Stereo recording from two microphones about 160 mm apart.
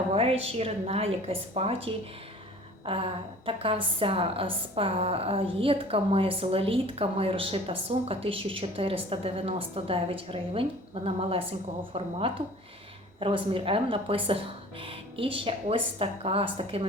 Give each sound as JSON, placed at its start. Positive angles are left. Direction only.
{"t": 0.1, "sound": "a woman's voice", "side_deg": -40}